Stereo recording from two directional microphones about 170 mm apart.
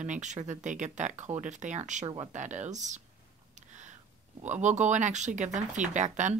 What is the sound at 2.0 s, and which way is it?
Speech, 30° right (ahead or behind).